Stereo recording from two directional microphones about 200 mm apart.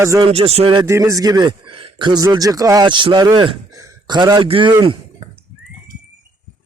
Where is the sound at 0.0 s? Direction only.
15° right (ahead or behind).